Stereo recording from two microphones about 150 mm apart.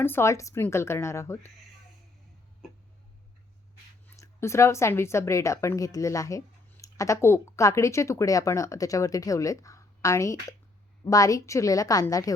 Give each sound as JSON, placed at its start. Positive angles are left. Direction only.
{"t": 0.0, "sound": "speech", "side_deg": 15}
{"t": 2.6, "sound": "hiccup", "side_deg": 0}
{"t": 4.0, "sound": "speech", "side_deg": 20}